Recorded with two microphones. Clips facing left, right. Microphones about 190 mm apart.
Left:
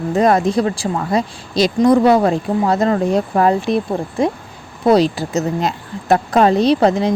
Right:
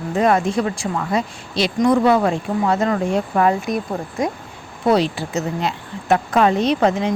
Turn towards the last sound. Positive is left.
turn(degrees=35)  # may be behind; listen again after turning